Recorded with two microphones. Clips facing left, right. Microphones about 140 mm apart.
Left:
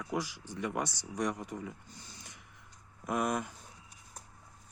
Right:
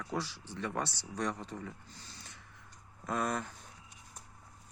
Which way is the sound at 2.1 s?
15° left (ahead or behind).